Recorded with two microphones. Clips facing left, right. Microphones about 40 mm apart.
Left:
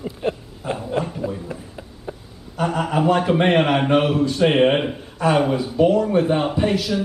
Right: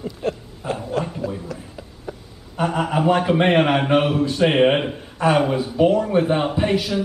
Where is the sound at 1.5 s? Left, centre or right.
Left.